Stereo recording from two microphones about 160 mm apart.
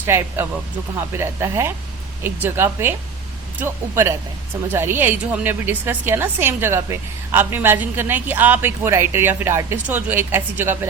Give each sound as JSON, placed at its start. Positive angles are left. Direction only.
{"t": 0.0, "sound": "a woman's voice", "side_deg": -15}